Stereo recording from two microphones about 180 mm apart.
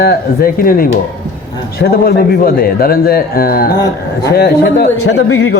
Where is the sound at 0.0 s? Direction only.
55° left (ahead or behind).